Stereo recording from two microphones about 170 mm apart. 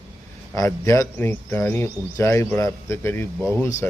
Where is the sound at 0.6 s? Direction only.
15° left (ahead or behind).